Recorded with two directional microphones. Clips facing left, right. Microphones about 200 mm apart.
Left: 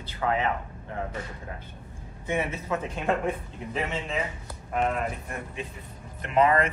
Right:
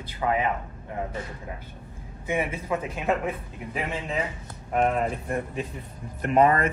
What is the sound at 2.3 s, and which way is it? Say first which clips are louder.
Speech: right 1 dB; 10° right (ahead or behind).